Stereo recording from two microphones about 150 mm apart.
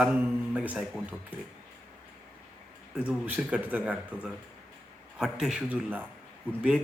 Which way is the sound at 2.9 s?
10° right (ahead or behind).